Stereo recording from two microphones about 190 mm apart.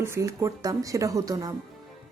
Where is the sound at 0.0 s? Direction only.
15° right (ahead or behind).